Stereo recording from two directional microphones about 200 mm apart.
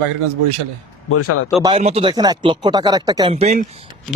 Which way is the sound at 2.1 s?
20° right (ahead or behind).